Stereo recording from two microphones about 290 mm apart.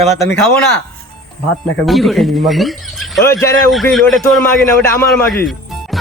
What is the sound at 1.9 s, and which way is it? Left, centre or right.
Speech, centre.